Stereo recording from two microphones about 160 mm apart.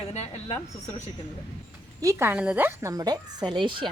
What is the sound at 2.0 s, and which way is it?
A woman's voice, 15° right (ahead or behind).